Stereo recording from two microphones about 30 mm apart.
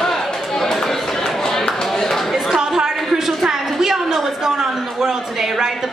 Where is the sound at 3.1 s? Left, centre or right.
Centre.